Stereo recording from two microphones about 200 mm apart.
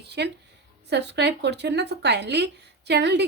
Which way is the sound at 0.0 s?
55° right (ahead or behind).